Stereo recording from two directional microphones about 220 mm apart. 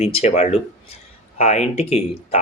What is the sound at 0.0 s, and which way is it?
Speech, 30° left (ahead or behind).